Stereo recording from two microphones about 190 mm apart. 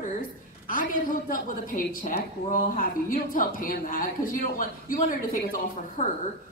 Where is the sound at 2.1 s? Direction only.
45° left (ahead or behind).